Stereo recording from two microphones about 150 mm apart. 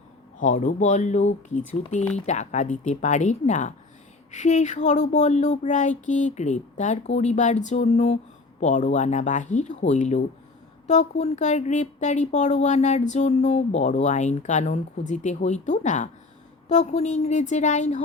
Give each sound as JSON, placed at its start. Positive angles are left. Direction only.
{"t": 0.4, "sound": "speech", "side_deg": 55}